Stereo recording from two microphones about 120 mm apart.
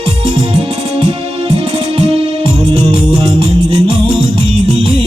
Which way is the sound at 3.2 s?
40° right (ahead or behind).